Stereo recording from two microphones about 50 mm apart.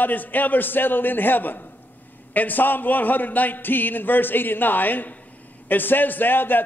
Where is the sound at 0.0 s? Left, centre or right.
Left.